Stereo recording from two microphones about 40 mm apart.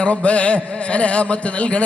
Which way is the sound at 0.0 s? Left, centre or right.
Left.